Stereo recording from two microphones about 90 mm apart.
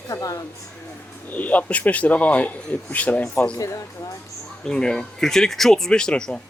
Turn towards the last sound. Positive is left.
turn(degrees=10)  # may be behind; listen again after turning